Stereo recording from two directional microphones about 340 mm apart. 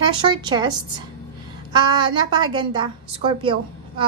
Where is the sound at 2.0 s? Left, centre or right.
Centre.